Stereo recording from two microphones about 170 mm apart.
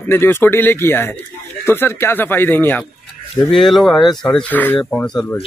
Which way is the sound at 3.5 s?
Centre (ahead or behind).